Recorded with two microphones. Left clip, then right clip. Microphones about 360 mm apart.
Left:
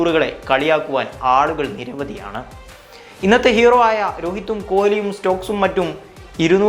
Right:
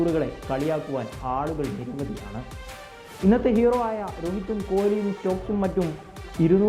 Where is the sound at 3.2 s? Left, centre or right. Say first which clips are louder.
Left 9 dB; centre.